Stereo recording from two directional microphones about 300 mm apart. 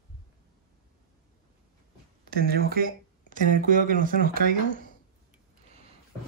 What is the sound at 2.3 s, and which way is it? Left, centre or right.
Speech, right.